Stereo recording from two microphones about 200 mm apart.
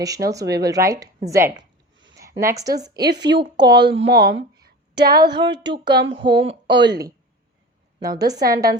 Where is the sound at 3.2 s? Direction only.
60° right (ahead or behind).